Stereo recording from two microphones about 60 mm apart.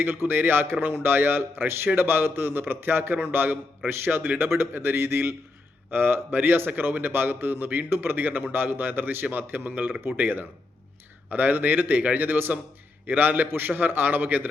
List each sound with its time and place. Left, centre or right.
0.0 s a man's voice: right